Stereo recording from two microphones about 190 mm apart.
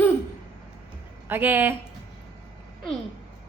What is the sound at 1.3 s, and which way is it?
Speech, 10° right (ahead or behind).